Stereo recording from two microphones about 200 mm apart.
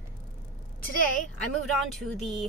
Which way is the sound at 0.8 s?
40° left (ahead or behind).